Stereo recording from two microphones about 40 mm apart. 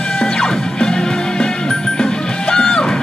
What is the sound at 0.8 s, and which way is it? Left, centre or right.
Music, centre.